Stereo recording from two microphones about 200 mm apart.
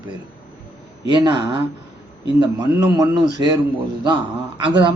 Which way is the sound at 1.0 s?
20° right (ahead or behind).